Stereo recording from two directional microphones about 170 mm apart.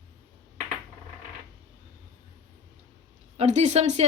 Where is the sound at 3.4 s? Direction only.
40° right (ahead or behind).